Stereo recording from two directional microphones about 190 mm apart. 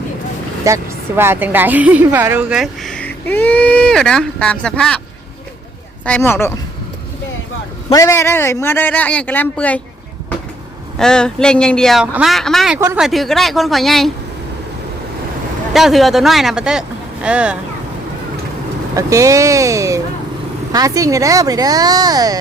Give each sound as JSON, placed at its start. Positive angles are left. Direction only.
{"t": 0.6, "sound": "a woman's voice", "side_deg": -15}
{"t": 6.1, "sound": "a man's voice", "side_deg": 10}
{"t": 7.9, "sound": "a man's voice", "side_deg": 15}
{"t": 10.9, "sound": "a woman's voice", "side_deg": 5}
{"t": 15.7, "sound": "a woman's voice", "side_deg": 0}
{"t": 18.9, "sound": "speech", "side_deg": -15}